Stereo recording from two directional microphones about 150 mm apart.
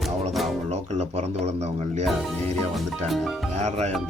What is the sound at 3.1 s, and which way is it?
Speech, centre (ahead or behind).